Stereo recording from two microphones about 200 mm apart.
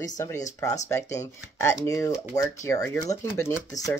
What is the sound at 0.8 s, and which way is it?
Speech, 15° left (ahead or behind).